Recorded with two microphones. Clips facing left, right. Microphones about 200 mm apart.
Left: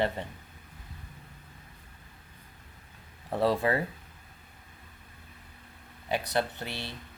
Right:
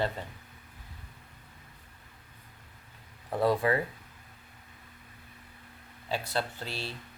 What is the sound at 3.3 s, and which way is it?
Speech, 25° left (ahead or behind).